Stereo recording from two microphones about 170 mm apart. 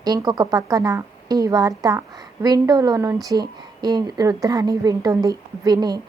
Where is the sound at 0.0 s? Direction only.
20° right (ahead or behind).